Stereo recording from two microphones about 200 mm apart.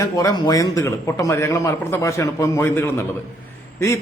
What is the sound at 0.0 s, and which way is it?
A man's voice, 15° left (ahead or behind).